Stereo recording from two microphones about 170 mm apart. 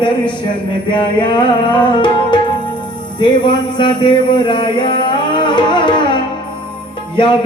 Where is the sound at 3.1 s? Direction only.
30° left (ahead or behind).